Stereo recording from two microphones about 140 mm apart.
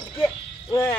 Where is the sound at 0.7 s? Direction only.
15° left (ahead or behind).